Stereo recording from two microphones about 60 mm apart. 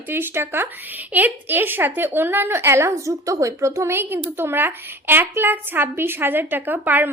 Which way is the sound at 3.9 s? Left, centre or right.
Right.